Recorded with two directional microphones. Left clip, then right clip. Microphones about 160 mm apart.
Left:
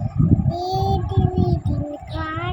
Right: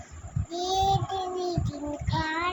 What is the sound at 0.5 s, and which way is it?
Child singing, 5° right (ahead or behind).